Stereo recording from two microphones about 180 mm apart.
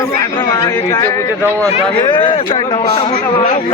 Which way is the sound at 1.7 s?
25° left (ahead or behind).